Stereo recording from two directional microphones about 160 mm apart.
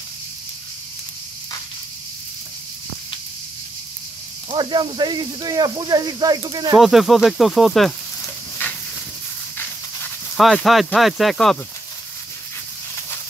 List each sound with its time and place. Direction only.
4.5 s speech: 30° right (ahead or behind)
6.8 s speech: centre (ahead or behind)
10.3 s speech: centre (ahead or behind)